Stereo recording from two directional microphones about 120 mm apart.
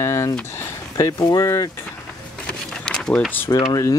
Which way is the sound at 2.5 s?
5° left (ahead or behind).